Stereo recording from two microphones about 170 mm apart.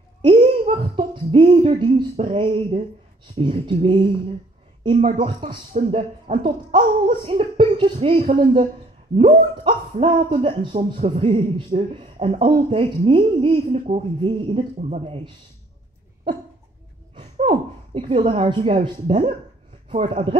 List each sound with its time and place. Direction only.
0.2 s a sound: 30° right (ahead or behind)
2.1 s speech: 35° right (ahead or behind)
4.9 s speech: 40° right (ahead or behind)
17.1 s speech: 30° right (ahead or behind)
18.8 s speech: 45° right (ahead or behind)